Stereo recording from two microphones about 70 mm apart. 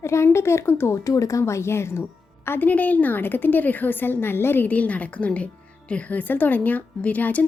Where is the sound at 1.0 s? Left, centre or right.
Left.